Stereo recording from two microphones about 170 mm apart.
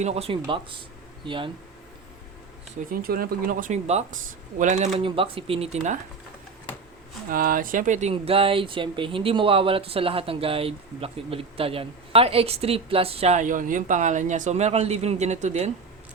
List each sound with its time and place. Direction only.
0.0 s speech: 35° right (ahead or behind)
2.9 s speech: 60° right (ahead or behind)
4.9 s speech: 35° right (ahead or behind)
7.3 s speech: 55° right (ahead or behind)
8.1 s speech: 35° right (ahead or behind)